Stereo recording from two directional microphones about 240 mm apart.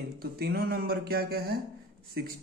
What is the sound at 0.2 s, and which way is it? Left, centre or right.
Speech, right.